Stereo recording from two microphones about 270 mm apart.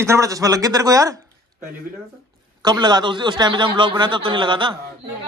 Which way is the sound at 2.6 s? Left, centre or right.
Centre.